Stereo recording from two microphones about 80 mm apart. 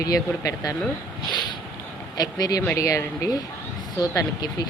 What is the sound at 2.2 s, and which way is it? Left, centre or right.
Speech, left.